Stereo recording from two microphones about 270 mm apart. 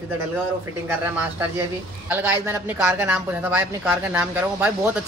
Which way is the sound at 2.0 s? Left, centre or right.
Centre.